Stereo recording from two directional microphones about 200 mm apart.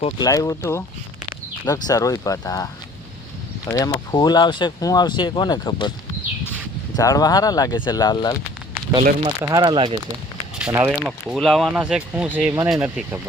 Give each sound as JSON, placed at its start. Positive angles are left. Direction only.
{"t": 0.0, "sound": "speech", "side_deg": 20}
{"t": 3.7, "sound": "speech", "side_deg": 20}
{"t": 6.9, "sound": "speech", "side_deg": 15}
{"t": 9.4, "sound": "speech", "side_deg": -20}
{"t": 10.6, "sound": "speech", "side_deg": -10}